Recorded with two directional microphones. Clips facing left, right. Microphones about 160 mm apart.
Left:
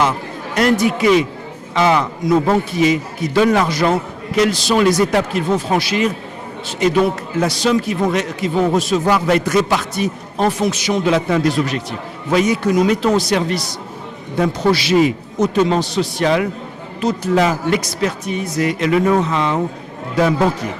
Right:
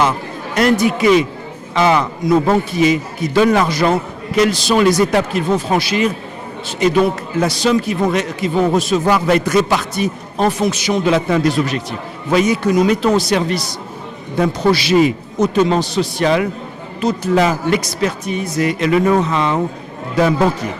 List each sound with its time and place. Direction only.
0.0 s a man's voice: 10° right (ahead or behind)
14.7 s a man's voice: 10° right (ahead or behind)